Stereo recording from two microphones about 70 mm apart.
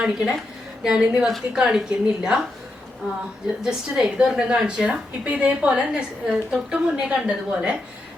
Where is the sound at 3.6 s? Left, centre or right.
Centre.